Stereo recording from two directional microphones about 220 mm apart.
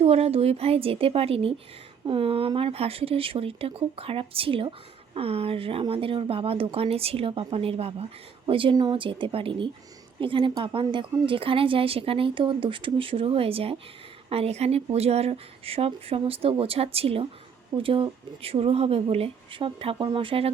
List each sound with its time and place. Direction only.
0.0 s a woman's voice: 30° right (ahead or behind)